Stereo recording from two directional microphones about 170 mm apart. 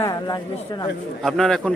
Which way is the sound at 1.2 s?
Centre (ahead or behind).